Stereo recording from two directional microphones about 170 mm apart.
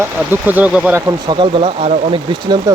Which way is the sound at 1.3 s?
30° right (ahead or behind).